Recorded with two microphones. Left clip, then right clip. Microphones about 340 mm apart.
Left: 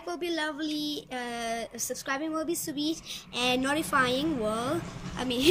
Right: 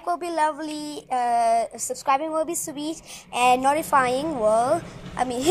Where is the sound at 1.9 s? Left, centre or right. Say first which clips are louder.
Right 8 dB; right.